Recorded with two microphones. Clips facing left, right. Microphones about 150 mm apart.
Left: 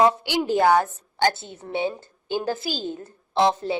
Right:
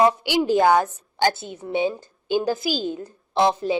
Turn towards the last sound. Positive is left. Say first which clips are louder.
# right 1 dB
turn(degrees=-15)  # may be behind; listen again after turning